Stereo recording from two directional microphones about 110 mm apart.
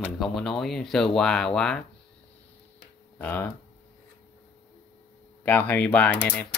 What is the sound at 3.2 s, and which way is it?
Speech, 15° left (ahead or behind).